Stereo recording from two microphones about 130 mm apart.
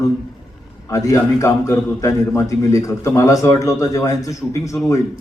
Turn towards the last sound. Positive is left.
turn(degrees=25)  # may be behind; listen again after turning